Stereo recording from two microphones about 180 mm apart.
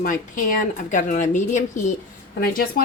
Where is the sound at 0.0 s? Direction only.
45° left (ahead or behind).